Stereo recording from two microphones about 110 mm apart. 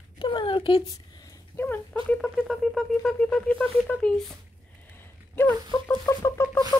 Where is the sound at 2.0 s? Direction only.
5° left (ahead or behind).